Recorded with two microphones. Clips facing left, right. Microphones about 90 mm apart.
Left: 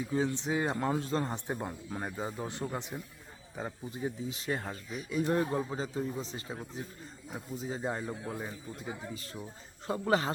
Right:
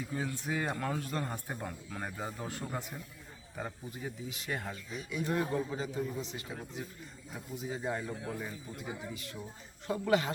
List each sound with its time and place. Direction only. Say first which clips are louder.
0.1 s a man's voice: left 6 dB; 25° left (ahead or behind)